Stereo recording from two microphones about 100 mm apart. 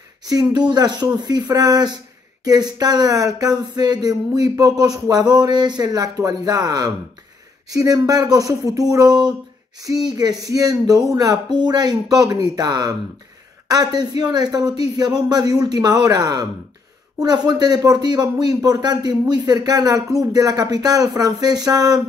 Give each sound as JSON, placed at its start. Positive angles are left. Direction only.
{"t": 0.2, "sound": "speech", "side_deg": -40}